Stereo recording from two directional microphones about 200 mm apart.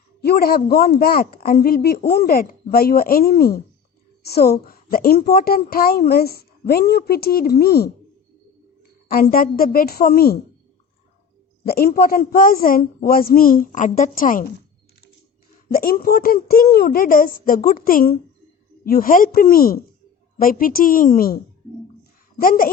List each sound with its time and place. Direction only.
0.2 s a woman's voice: 50° left (ahead or behind)
9.0 s a woman's voice: 50° left (ahead or behind)
11.6 s a woman's voice: 50° left (ahead or behind)
15.7 s a woman's voice: 45° left (ahead or behind)